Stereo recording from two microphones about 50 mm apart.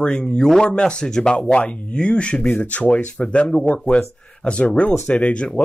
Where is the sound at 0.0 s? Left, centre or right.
Centre.